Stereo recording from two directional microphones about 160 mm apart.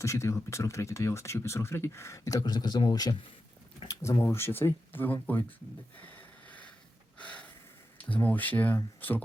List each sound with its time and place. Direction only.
0.0 s speech: 20° left (ahead or behind)
6.0 s a sound: 10° left (ahead or behind)
7.9 s speech: 10° left (ahead or behind)